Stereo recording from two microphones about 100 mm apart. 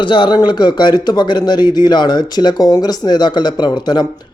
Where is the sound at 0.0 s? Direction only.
55° left (ahead or behind).